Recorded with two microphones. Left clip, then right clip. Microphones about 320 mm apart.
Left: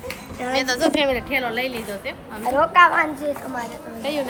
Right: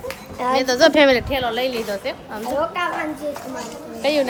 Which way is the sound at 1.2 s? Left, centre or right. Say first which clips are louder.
Right 2 dB; centre.